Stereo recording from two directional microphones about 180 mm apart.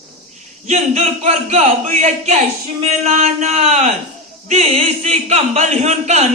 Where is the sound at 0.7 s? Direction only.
40° right (ahead or behind).